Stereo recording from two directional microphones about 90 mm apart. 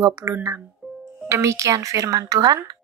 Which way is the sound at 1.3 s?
35° right (ahead or behind).